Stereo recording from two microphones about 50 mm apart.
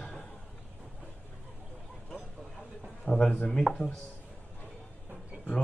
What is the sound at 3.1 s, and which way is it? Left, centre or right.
Speech, left.